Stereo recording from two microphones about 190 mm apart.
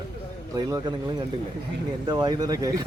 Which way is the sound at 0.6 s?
20° right (ahead or behind).